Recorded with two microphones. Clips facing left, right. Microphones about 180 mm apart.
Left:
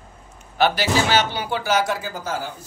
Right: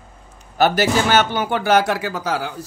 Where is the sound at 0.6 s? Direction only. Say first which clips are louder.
Right 3 dB; 45° right (ahead or behind); by 2.5 s 85° right.